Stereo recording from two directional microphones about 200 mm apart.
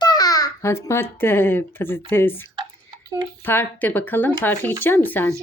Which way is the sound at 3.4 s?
10° left (ahead or behind).